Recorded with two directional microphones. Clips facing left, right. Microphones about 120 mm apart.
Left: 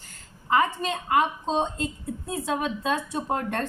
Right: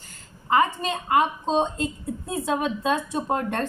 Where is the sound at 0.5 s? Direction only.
25° right (ahead or behind).